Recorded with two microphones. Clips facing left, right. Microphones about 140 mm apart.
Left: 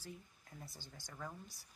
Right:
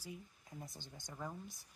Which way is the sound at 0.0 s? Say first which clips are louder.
Right 2 dB; 20° right (ahead or behind).